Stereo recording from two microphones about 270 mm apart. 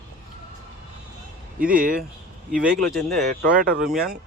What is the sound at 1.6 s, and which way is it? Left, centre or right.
Speech, centre.